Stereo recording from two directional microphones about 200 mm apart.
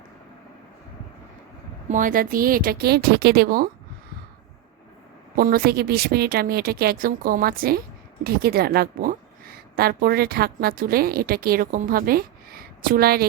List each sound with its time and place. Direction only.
1.9 s a woman's voice: 40° right (ahead or behind)
5.4 s a woman's voice: 50° right (ahead or behind)